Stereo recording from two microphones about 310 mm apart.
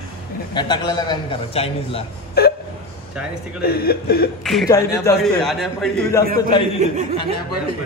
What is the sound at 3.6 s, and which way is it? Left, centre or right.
Speech, left.